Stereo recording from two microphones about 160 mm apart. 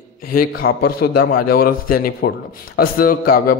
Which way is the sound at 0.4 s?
70° left (ahead or behind).